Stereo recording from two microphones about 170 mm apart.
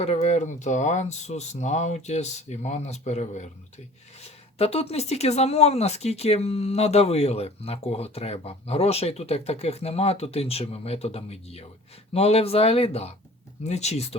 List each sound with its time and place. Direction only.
0.0 s speech: 40° left (ahead or behind)